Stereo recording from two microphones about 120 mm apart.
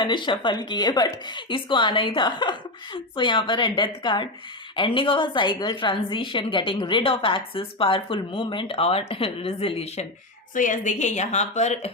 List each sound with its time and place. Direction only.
0.0 s a woman's voice: 40° left (ahead or behind); by 10.1 s 60° left (ahead or behind)
10.5 s speech: 90° left; by 11.9 s 65° left (ahead or behind)